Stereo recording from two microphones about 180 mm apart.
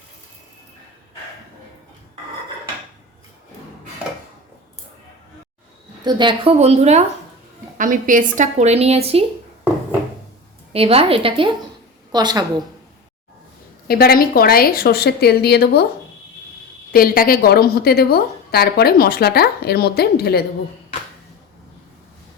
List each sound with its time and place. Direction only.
6.1 s a woman's voice: 25° right (ahead or behind)
7.8 s a woman's voice: 50° right (ahead or behind)
10.7 s a woman's voice: 35° right (ahead or behind)
13.8 s a woman's voice: 55° left (ahead or behind)
16.9 s a woman's voice: 55° left (ahead or behind)